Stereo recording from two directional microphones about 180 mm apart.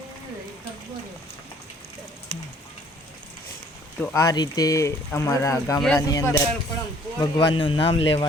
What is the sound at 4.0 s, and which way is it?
Speech, 15° left (ahead or behind).